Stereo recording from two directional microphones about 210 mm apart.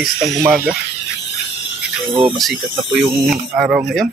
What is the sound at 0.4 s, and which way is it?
Speech, 10° right (ahead or behind).